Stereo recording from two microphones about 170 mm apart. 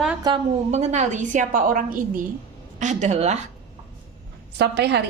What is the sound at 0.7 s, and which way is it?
A woman's voice, 40° right (ahead or behind).